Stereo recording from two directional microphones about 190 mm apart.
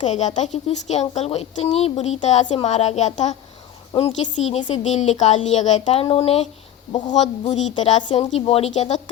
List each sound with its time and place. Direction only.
0.0 s a woman's voice: 40° left (ahead or behind)
8.0 s a woman's voice: 25° left (ahead or behind)